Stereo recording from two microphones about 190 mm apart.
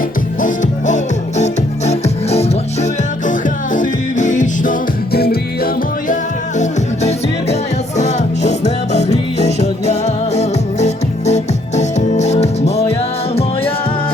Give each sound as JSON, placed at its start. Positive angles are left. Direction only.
{"t": 0.4, "sound": "music", "side_deg": 40}
{"t": 7.9, "sound": "music", "side_deg": 35}